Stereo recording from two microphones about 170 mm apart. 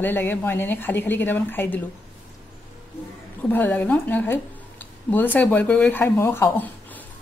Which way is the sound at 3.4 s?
10° left (ahead or behind).